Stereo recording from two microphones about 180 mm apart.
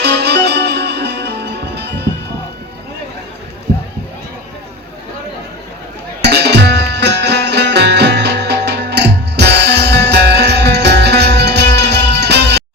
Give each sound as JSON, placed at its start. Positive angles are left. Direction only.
{"t": 0.0, "sound": "music", "side_deg": -65}
{"t": 6.2, "sound": "music", "side_deg": -70}